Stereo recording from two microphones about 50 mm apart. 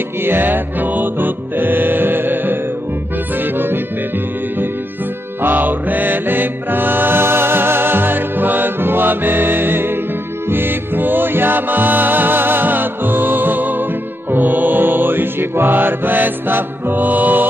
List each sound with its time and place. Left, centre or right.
0.2 s music: right
5.4 s music: right